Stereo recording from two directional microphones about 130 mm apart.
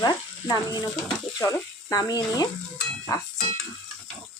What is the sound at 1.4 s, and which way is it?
Speech, 25° left (ahead or behind).